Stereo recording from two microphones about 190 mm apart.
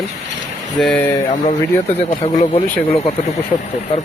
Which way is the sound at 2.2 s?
35° left (ahead or behind).